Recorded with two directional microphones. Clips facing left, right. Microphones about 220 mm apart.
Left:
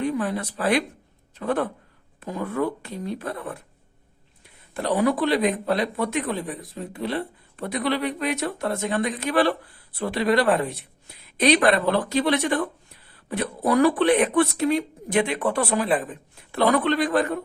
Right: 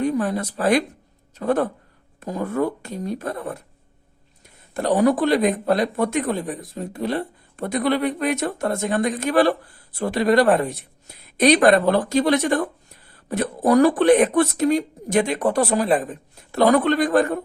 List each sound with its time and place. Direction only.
0.0 s speech: 45° right (ahead or behind)